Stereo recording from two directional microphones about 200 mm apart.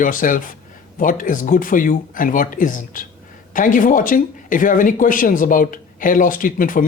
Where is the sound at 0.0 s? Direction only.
45° left (ahead or behind).